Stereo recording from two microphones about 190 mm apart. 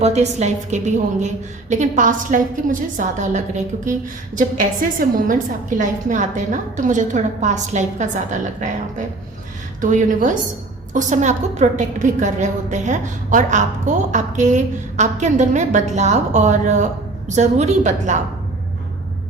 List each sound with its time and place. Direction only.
0.0 s a woman's voice: 35° right (ahead or behind)
9.8 s a woman's voice: 45° right (ahead or behind)